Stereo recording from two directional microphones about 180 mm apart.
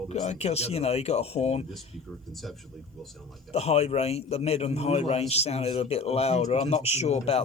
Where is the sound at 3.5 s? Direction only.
35° left (ahead or behind).